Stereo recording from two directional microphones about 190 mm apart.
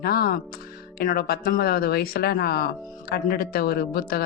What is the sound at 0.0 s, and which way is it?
Speech, 50° left (ahead or behind).